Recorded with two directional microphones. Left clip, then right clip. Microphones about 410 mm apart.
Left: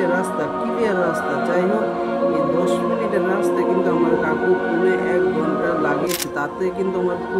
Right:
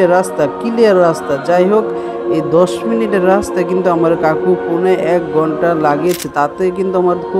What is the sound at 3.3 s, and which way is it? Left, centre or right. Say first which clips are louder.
Speech: right 6 dB; centre.